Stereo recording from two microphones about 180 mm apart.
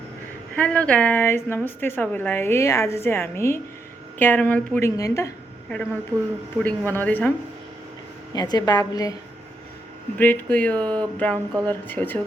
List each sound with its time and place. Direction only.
0.5 s a woman's voice: 5° left (ahead or behind)
5.6 s a woman's voice: 5° left (ahead or behind)
8.4 s a woman's voice: 20° left (ahead or behind)
10.2 s a woman's voice: 10° left (ahead or behind)